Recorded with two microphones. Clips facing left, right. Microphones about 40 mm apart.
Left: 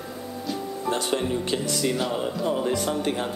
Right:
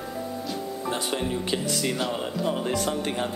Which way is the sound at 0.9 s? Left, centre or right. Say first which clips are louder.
Left 3 dB; centre.